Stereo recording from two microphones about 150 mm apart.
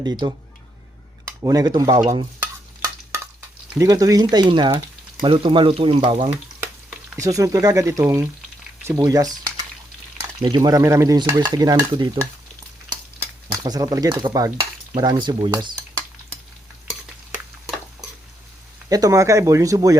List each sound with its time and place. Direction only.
0.0 s stir: 30° right (ahead or behind)
1.4 s stir: 25° right (ahead or behind)
3.8 s stir: 25° right (ahead or behind)
5.2 s speech: 35° right (ahead or behind)
7.2 s stir: 20° right (ahead or behind)
8.8 s speech: 20° right (ahead or behind)
10.4 s stir: 25° right (ahead or behind)
13.5 s stir: 25° right (ahead or behind)
18.9 s stir: 25° right (ahead or behind)